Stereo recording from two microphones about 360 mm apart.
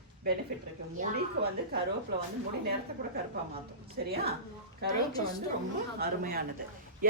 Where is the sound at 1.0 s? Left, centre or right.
Right.